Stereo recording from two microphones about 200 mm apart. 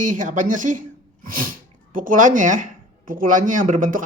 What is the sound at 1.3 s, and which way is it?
Sneeze, 45° right (ahead or behind).